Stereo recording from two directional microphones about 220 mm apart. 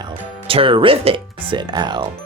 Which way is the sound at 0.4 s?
25° right (ahead or behind).